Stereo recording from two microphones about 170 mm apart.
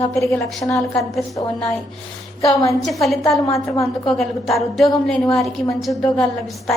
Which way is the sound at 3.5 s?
15° left (ahead or behind).